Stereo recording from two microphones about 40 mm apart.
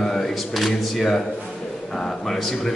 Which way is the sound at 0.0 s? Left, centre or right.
Centre.